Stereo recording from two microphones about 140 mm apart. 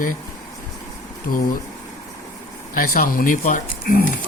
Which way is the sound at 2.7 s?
90° left.